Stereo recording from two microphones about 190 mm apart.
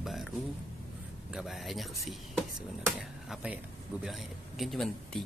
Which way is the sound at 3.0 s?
5° right (ahead or behind).